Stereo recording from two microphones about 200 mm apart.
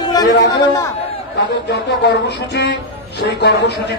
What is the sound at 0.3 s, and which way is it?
A man's voice, 60° left (ahead or behind).